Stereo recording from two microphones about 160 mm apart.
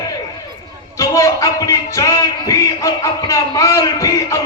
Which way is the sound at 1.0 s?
20° left (ahead or behind).